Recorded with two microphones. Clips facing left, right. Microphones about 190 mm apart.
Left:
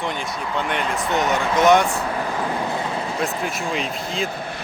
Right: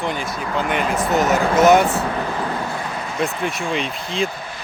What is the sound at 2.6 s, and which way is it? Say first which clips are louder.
Vehicle: left 2 dB; 25° left (ahead or behind).